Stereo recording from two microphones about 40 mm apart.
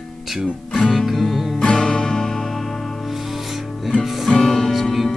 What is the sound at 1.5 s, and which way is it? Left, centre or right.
Music, centre.